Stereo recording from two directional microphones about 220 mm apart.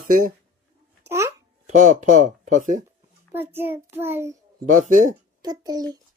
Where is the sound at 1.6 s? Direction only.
35° right (ahead or behind).